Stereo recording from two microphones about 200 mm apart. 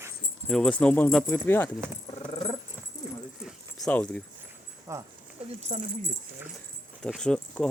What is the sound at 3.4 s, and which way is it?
Keys jangling, centre (ahead or behind).